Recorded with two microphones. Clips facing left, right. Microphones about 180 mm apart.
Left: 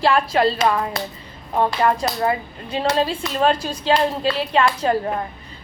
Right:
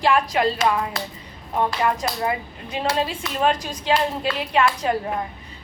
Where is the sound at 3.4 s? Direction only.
15° right (ahead or behind).